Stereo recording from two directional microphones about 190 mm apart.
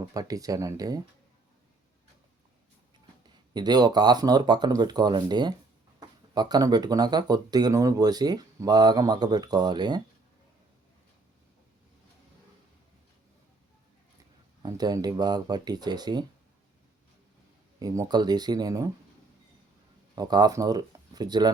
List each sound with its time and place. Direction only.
0.1 s speech: 20° right (ahead or behind)
3.5 s speech: 20° right (ahead or behind)
14.6 s speech: 20° right (ahead or behind)
17.7 s speech: 15° right (ahead or behind)
20.1 s speech: 20° right (ahead or behind)